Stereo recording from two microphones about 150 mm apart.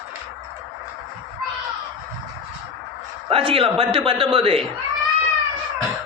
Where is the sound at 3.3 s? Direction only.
40° right (ahead or behind).